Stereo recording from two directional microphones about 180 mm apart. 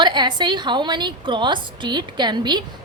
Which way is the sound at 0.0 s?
25° right (ahead or behind).